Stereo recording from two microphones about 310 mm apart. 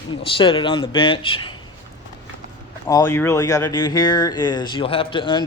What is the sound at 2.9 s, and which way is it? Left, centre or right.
Speech, centre.